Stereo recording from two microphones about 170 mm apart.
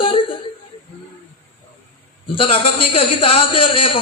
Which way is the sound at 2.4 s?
30° left (ahead or behind).